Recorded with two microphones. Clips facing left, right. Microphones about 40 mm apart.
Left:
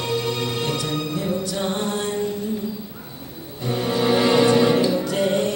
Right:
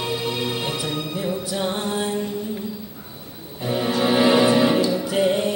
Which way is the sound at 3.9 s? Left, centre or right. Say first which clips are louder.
Right 1 dB; centre.